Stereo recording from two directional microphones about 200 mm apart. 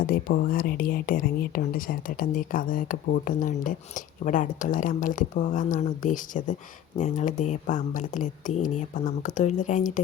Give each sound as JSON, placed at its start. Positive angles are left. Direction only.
{"t": 0.0, "sound": "speech", "side_deg": 45}